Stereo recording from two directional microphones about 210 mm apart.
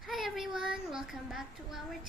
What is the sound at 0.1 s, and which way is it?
A woman's voice, centre (ahead or behind).